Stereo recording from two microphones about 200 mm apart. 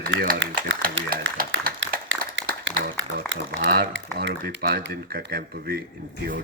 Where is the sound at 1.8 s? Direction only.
70° right (ahead or behind).